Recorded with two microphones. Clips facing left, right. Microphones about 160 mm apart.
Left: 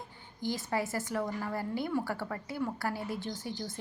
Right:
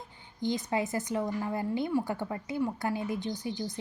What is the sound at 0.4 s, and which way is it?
A woman's voice, 20° right (ahead or behind).